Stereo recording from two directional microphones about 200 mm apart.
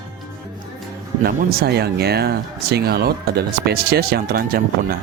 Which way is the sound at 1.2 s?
50° right (ahead or behind).